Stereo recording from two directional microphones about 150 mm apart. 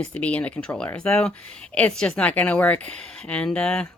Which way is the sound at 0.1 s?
10° left (ahead or behind).